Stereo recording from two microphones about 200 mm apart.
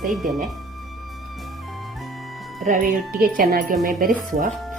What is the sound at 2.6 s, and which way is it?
Speech, 40° right (ahead or behind).